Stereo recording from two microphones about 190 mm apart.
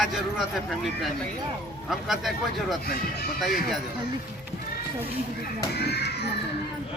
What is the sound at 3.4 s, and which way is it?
Speech, centre (ahead or behind).